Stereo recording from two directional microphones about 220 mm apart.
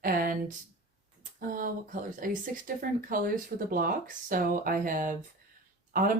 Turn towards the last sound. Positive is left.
turn(degrees=-40)  # may be behind; listen again after turning